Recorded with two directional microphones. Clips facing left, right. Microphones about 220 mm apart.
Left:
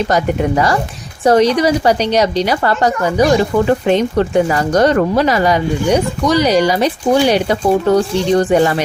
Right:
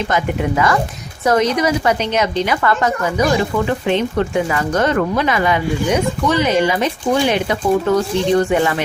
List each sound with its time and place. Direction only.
0.1 s a woman's voice: 35° left (ahead or behind)